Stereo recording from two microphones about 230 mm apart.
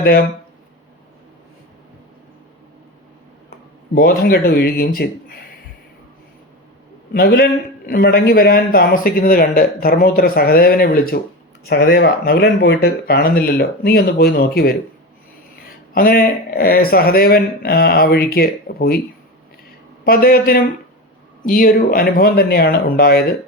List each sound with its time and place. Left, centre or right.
3.9 s a man's voice: left
7.1 s a man's voice: left
15.9 s a man's voice: left
20.1 s a man's voice: left